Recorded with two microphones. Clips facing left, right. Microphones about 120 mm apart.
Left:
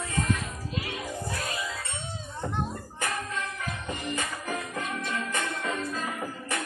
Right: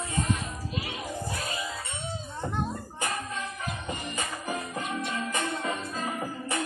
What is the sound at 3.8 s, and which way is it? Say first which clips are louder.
Music: left 4 dB; 20° right (ahead or behind).